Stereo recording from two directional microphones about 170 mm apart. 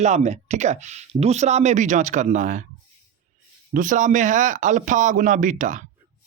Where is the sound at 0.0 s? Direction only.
40° right (ahead or behind).